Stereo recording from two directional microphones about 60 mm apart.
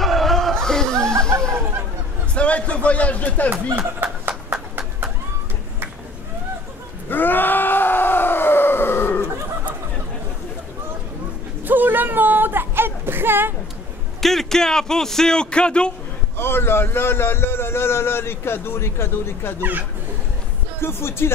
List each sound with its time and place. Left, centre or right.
0.0 s a sound: centre
2.3 s a man's voice: left
3.7 s horse: right
7.1 s groan: left
11.6 s a sound: right
14.2 s speech: centre
16.3 s a man's voice: left
20.8 s a man's voice: left